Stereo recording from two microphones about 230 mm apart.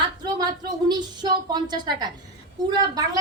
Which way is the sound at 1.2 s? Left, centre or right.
Centre.